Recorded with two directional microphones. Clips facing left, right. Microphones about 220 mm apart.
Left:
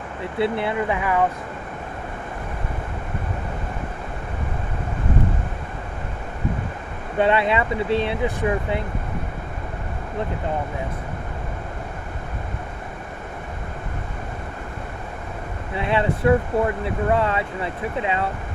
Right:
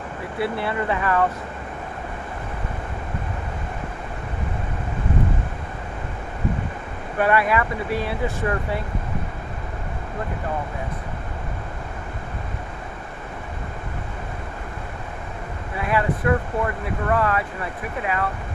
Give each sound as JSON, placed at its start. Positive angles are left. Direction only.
{"t": 0.3, "sound": "speech", "side_deg": 20}
{"t": 7.2, "sound": "speech", "side_deg": 25}
{"t": 15.8, "sound": "speech", "side_deg": 25}